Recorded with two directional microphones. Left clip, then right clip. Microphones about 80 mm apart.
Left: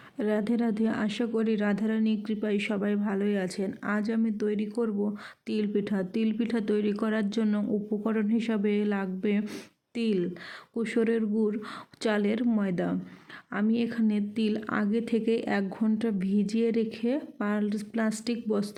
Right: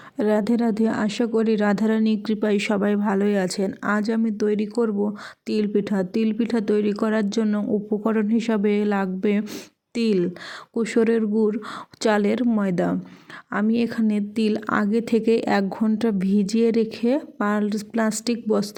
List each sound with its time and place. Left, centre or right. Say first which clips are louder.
0.2 s speech: right 7 dB; right
1.7 s a woman's voice: right 7 dB; right